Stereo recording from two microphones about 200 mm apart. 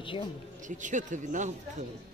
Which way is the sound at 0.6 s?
40° right (ahead or behind).